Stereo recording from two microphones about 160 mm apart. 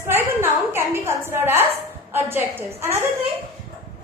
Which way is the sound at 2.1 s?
15° right (ahead or behind).